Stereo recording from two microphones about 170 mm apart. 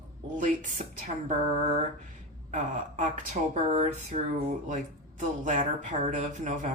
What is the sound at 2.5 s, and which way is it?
Speech, 45° right (ahead or behind).